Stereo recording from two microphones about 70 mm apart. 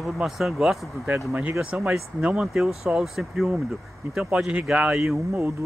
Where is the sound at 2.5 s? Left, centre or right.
Centre.